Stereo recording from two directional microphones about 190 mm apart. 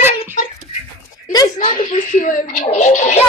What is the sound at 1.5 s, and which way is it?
Speech, 40° left (ahead or behind).